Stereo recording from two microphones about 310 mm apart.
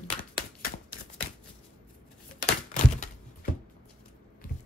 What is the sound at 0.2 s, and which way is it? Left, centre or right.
Typewriter, left.